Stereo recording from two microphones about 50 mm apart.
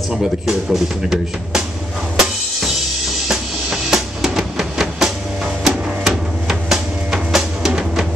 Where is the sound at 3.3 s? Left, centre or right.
Centre.